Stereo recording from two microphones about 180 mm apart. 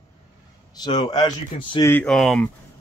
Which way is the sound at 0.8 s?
25° left (ahead or behind).